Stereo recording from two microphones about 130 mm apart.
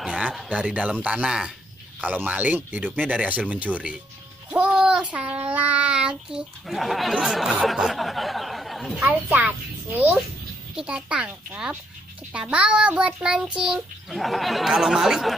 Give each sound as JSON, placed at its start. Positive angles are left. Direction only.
{"t": 0.0, "sound": "a sound", "side_deg": -5}
{"t": 0.5, "sound": "a child's voice", "side_deg": -10}
{"t": 9.0, "sound": "a child's voice", "side_deg": -15}
{"t": 10.8, "sound": "a child's voice", "side_deg": -5}